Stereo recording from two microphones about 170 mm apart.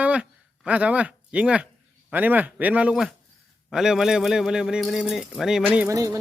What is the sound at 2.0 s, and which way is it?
Speech, 10° right (ahead or behind).